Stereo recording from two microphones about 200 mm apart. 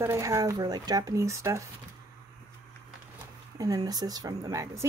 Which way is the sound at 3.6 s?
20° right (ahead or behind).